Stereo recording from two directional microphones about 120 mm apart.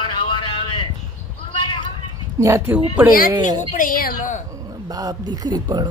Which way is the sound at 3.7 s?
90° left.